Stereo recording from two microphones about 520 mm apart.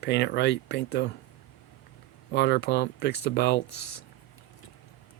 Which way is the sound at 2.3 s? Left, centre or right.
Centre.